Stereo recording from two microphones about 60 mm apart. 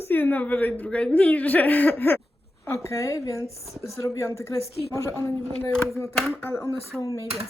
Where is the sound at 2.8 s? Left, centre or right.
Left.